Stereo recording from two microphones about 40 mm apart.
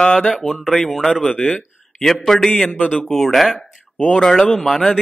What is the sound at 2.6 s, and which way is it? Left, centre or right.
Speech, left.